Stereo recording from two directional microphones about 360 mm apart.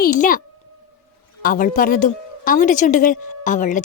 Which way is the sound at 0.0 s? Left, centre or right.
Left.